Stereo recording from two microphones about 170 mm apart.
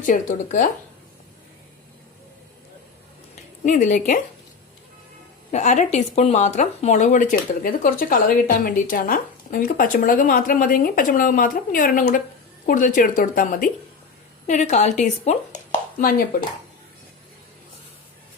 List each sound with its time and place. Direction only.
0.0 s speech: 50° left (ahead or behind)
3.6 s speech: 45° left (ahead or behind)
5.5 s speech: 40° left (ahead or behind)
14.4 s speech: 45° left (ahead or behind)